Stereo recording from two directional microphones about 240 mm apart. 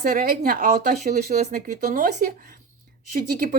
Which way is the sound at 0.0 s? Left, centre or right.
Right.